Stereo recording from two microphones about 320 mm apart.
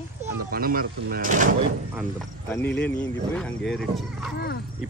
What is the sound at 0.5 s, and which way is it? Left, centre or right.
Speech, right.